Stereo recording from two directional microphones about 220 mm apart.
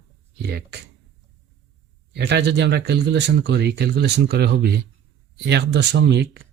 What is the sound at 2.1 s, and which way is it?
Speech, 50° right (ahead or behind).